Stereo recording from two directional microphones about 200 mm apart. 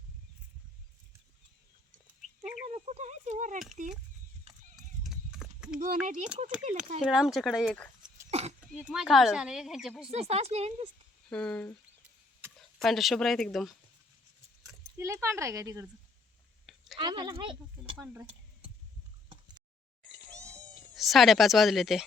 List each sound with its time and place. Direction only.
2.4 s a sound: 35° right (ahead or behind)
4.5 s horse: 30° right (ahead or behind)
5.0 s clip-clop: centre (ahead or behind)
5.8 s speech: 40° right (ahead or behind)
7.0 s speech: centre (ahead or behind)
8.3 s a sound: 30° right (ahead or behind)
8.6 s speech: 5° right (ahead or behind)
10.1 s speech: 30° right (ahead or behind)
11.3 s speech: 5° left (ahead or behind)
14.9 s speech: 15° right (ahead or behind)
16.7 s a sound: centre (ahead or behind)
17.0 s speech: 20° right (ahead or behind)
17.9 s speech: 10° right (ahead or behind)
20.3 s cat: 5° left (ahead or behind)